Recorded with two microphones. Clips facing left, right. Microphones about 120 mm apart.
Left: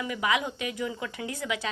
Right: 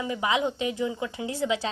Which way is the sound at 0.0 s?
25° right (ahead or behind).